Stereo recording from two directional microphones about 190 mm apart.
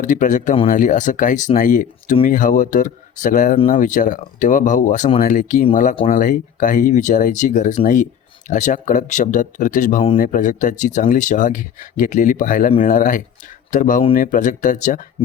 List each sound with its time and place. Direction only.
0.0 s speech: 45° left (ahead or behind)